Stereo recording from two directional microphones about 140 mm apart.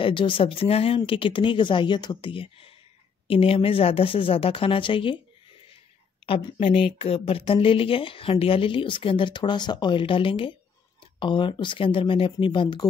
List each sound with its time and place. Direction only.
0.0 s a woman's voice: 35° left (ahead or behind)
6.2 s a woman's voice: 40° left (ahead or behind)